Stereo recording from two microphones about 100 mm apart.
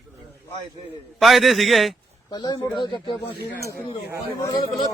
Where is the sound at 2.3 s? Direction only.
45° left (ahead or behind).